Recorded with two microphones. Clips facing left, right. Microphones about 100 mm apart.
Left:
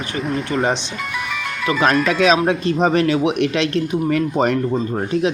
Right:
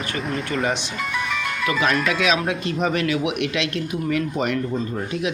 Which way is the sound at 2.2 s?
35° left (ahead or behind).